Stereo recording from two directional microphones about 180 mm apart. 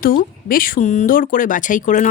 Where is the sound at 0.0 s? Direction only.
55° left (ahead or behind).